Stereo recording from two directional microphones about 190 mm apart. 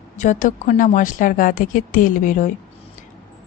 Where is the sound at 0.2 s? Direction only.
40° left (ahead or behind).